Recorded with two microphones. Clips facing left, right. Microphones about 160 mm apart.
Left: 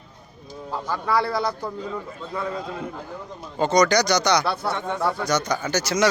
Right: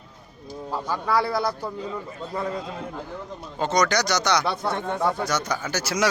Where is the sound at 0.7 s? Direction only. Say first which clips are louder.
Even; 10° right (ahead or behind).